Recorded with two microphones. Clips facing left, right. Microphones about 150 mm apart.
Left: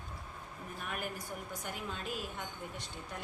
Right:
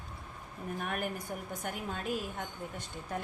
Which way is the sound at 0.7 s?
55° right (ahead or behind).